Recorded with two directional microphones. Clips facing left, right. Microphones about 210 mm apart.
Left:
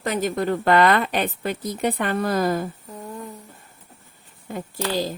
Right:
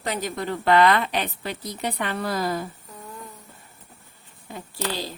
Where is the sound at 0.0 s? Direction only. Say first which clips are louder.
Left 5 dB; 50° left (ahead or behind).